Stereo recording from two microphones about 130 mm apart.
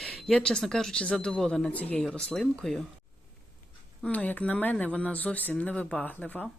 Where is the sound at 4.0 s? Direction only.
10° left (ahead or behind).